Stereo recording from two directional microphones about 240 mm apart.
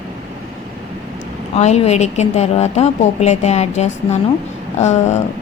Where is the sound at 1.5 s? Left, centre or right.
Left.